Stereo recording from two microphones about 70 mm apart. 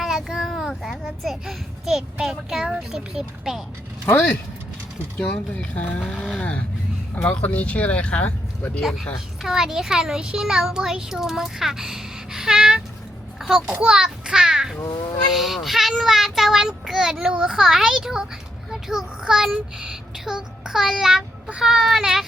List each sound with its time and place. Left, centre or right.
0.0 s a child's voice: centre
5.5 s speech: left
6.1 s speech: centre
7.2 s speech: left
8.8 s a child's voice: centre
13.7 s children playing: centre
14.8 s cat: left
15.3 s a child's voice: centre